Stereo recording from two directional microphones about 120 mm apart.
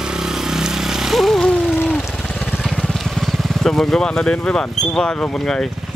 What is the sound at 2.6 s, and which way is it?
Speech, centre (ahead or behind).